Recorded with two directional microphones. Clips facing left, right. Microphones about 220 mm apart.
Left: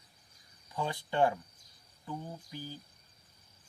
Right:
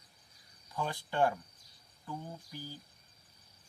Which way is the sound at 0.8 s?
20° left (ahead or behind).